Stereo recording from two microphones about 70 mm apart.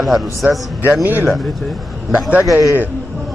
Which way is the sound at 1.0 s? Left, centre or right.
Right.